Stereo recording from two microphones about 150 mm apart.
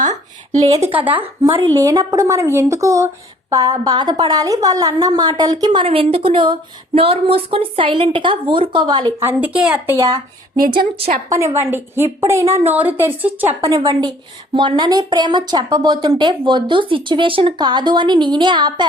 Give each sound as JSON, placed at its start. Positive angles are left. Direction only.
{"t": 0.0, "sound": "a sound", "side_deg": -55}
{"t": 0.9, "sound": "a woman's voice", "side_deg": -10}
{"t": 1.5, "sound": "a woman's voice", "side_deg": -30}
{"t": 9.2, "sound": "a woman's voice", "side_deg": -10}
{"t": 11.3, "sound": "a woman's voice", "side_deg": -20}
{"t": 14.5, "sound": "a woman's voice", "side_deg": -30}